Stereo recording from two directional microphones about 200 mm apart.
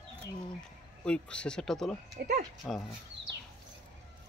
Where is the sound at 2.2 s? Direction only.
55° right (ahead or behind).